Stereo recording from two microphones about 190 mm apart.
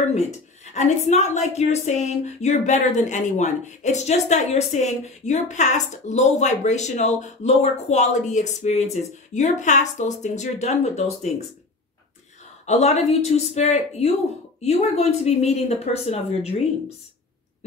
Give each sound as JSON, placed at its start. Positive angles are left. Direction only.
{"t": 0.1, "sound": "a woman's voice", "side_deg": 35}
{"t": 12.6, "sound": "a woman's voice", "side_deg": 35}